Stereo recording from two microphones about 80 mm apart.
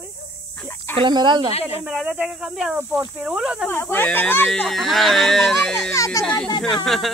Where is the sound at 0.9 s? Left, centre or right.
Right.